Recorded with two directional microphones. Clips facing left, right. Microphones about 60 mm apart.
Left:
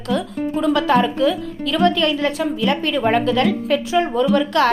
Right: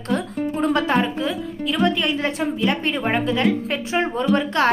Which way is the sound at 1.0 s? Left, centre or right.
Right.